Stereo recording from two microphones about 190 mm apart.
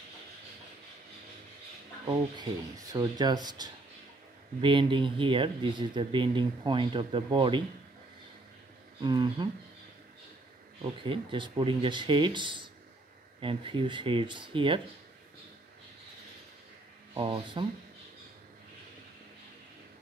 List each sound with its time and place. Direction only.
2.0 s speech: 25° right (ahead or behind)
9.0 s speech: 25° right (ahead or behind)
10.8 s speech: 25° right (ahead or behind)
17.1 s speech: 25° right (ahead or behind)